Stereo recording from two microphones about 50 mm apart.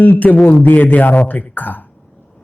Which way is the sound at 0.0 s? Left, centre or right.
Left.